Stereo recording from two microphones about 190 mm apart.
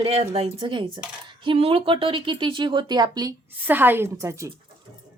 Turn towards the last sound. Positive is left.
turn(degrees=-15)  # may be behind; listen again after turning